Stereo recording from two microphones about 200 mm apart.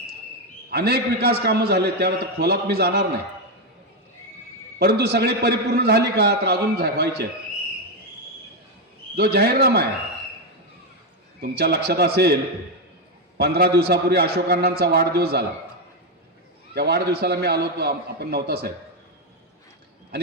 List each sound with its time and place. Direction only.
0.7 s a man's voice: 55° right (ahead or behind)
4.8 s a man's voice: 55° right (ahead or behind)
9.1 s a man's voice: 55° right (ahead or behind)
11.3 s a man's voice: 55° right (ahead or behind)
16.7 s a man's voice: 55° right (ahead or behind)